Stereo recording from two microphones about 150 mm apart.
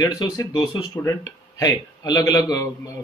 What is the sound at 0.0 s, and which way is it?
A man's voice, 25° left (ahead or behind).